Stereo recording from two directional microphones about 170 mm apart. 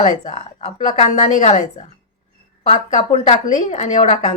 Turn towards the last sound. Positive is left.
turn(degrees=45)  # may be behind; listen again after turning